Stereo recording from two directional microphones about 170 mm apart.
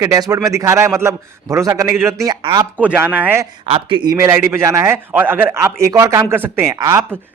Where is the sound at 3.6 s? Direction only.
30° right (ahead or behind).